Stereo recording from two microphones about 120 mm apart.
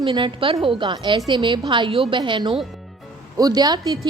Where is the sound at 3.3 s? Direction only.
35° right (ahead or behind).